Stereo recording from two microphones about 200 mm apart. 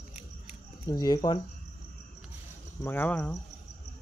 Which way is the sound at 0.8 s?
20° left (ahead or behind).